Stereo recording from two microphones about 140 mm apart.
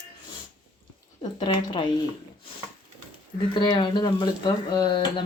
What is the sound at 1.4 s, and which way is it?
Speech, 35° left (ahead or behind).